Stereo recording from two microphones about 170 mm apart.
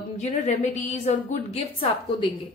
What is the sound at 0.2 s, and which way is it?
A woman's voice, 45° left (ahead or behind).